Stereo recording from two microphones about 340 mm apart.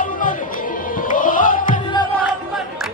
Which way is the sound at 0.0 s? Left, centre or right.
Left.